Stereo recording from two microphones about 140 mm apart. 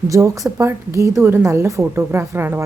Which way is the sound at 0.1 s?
25° right (ahead or behind).